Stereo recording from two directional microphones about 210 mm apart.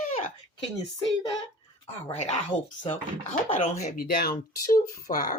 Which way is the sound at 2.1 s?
30° left (ahead or behind).